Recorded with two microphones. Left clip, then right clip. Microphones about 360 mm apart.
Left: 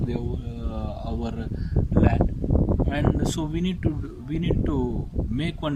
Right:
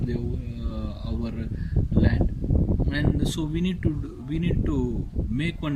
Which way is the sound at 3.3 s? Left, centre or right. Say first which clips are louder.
Even; centre.